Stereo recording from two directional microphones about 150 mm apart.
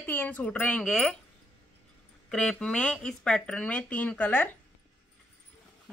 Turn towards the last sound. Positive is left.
turn(degrees=10)  # may be behind; listen again after turning